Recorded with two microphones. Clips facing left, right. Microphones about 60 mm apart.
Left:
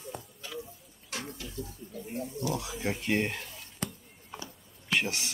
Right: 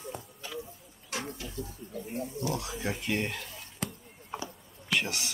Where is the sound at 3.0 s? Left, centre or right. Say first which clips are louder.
Left 4 dB; left.